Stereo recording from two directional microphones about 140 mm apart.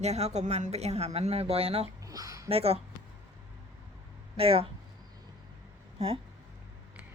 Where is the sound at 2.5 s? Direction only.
45° right (ahead or behind).